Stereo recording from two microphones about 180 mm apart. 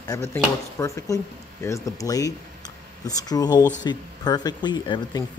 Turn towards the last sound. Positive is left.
turn(degrees=25)  # may be behind; listen again after turning